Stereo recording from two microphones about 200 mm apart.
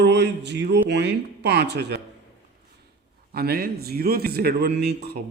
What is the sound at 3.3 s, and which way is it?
A man's voice, 50° right (ahead or behind).